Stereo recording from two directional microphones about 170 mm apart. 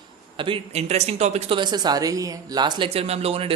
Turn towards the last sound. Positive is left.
turn(degrees=-35)  # may be behind; listen again after turning